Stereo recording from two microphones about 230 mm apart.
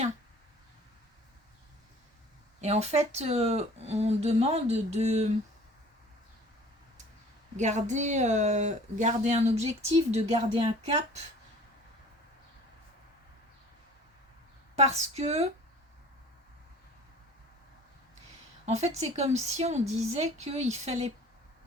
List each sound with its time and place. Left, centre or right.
2.6 s speech: right
7.5 s speech: right
14.8 s speech: right
18.6 s speech: right